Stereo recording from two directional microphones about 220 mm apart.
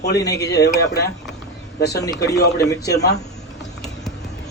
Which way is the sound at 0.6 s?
50° left (ahead or behind).